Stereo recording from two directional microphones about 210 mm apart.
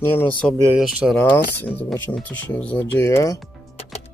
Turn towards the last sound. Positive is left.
turn(degrees=15)  # may be behind; listen again after turning